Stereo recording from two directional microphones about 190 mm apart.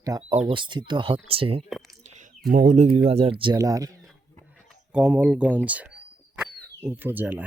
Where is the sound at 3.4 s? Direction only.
20° right (ahead or behind).